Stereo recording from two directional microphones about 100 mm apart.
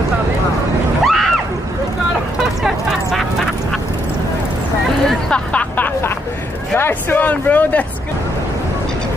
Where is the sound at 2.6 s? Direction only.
5° right (ahead or behind).